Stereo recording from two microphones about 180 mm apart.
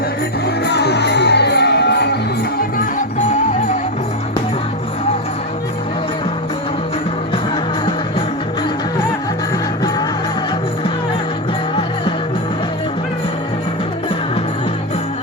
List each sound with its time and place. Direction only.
0.4 s music: 65° left (ahead or behind)